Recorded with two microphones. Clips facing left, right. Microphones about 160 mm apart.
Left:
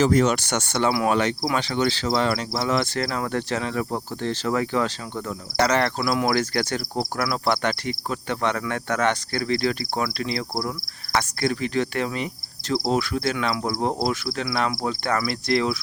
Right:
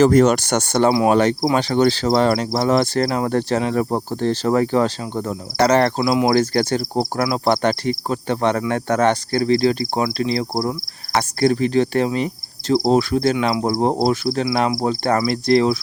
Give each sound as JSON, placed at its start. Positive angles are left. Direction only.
{"t": 0.0, "sound": "speech", "side_deg": -45}
{"t": 6.0, "sound": "speech", "side_deg": -20}
{"t": 6.3, "sound": "speech", "side_deg": -35}
{"t": 11.2, "sound": "speech", "side_deg": -35}
{"t": 13.5, "sound": "speech", "side_deg": -25}
{"t": 13.8, "sound": "speech", "side_deg": -35}